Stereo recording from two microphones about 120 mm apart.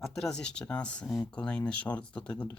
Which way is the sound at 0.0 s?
5° left (ahead or behind).